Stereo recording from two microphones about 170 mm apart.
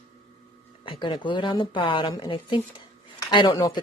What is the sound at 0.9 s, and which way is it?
A woman's voice, 30° left (ahead or behind).